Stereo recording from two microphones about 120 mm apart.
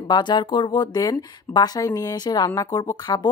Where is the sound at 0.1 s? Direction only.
40° left (ahead or behind).